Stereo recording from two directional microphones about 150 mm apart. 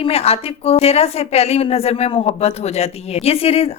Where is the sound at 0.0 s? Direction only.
40° left (ahead or behind).